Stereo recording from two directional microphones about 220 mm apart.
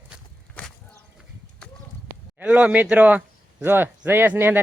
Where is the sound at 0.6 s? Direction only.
5° left (ahead or behind).